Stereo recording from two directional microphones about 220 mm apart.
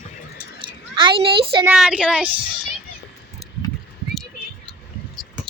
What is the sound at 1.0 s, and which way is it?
Speech, 25° right (ahead or behind).